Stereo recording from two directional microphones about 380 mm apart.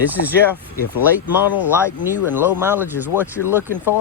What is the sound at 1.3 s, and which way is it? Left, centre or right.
Speech, left.